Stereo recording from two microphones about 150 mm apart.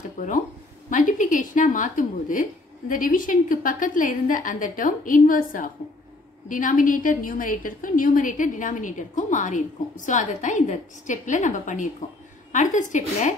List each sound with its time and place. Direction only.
0.2 s a woman's voice: 60° left (ahead or behind)